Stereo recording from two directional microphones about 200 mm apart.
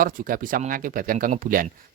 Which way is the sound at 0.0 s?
45° right (ahead or behind).